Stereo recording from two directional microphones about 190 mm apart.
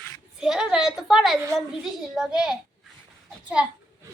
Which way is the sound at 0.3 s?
5° right (ahead or behind).